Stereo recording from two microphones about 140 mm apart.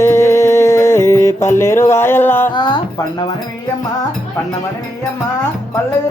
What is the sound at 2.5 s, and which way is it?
Speech, 30° left (ahead or behind).